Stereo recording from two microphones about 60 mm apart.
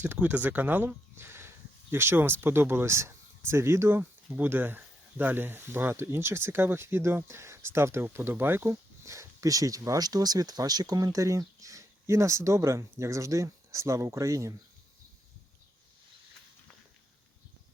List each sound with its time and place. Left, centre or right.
0.0 s speech: right
4.3 s speech: right